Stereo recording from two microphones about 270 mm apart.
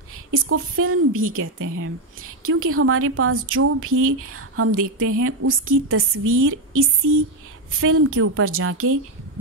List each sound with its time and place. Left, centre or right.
0.1 s a woman's voice: right